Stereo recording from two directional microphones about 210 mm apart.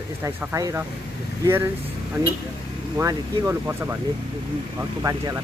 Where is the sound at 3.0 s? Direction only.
15° right (ahead or behind).